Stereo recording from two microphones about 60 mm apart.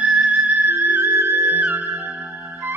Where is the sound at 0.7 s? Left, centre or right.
Right.